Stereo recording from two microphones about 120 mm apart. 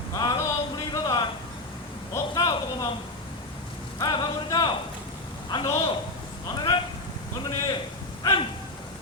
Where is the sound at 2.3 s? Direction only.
35° left (ahead or behind).